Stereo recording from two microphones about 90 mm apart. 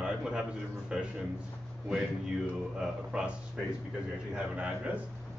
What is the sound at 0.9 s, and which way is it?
Speech, 5° right (ahead or behind).